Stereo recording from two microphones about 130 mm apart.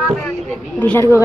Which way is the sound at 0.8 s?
15° left (ahead or behind).